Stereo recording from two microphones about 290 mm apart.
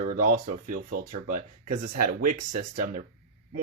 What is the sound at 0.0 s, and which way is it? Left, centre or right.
Speech, right.